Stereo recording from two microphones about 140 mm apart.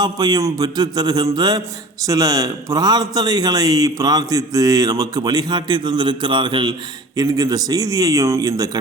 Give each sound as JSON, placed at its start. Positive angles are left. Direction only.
{"t": 0.0, "sound": "a man's voice", "side_deg": -30}